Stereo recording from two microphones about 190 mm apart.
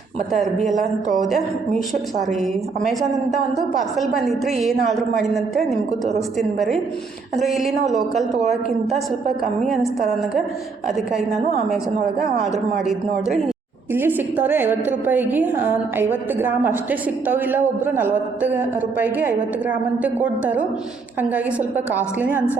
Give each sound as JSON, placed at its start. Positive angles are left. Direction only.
{"t": 0.8, "sound": "speech", "side_deg": -45}
{"t": 3.3, "sound": "a woman's voice", "side_deg": 0}
{"t": 7.4, "sound": "a woman's voice", "side_deg": 0}
{"t": 12.8, "sound": "a woman's voice", "side_deg": 0}